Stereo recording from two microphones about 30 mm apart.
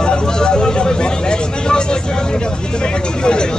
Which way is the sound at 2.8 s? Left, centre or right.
Left.